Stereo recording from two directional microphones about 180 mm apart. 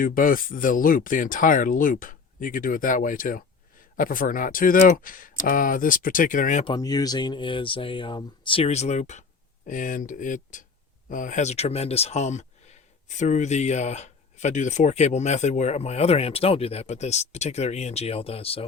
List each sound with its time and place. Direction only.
0.0 s speech: 50° left (ahead or behind)
6.7 s speech: 20° left (ahead or behind)